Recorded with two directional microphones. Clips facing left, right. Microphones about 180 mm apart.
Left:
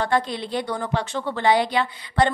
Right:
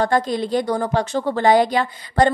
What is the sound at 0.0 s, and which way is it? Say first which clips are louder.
A woman's voice: right 4 dB; 40° right (ahead or behind).